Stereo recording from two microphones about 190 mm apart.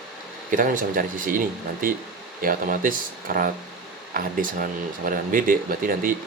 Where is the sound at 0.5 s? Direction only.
45° right (ahead or behind).